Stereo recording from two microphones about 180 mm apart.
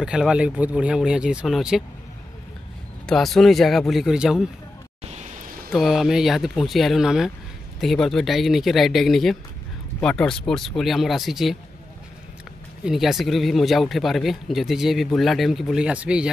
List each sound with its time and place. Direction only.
0.0 s speech: 5° right (ahead or behind)
3.1 s speech: centre (ahead or behind)
5.1 s a sound: 40° right (ahead or behind)
5.7 s speech: centre (ahead or behind)
12.8 s speech: centre (ahead or behind)